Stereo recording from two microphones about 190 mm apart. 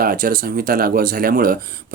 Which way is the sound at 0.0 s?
50° right (ahead or behind).